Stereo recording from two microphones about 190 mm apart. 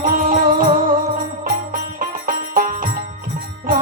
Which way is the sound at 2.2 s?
45° right (ahead or behind).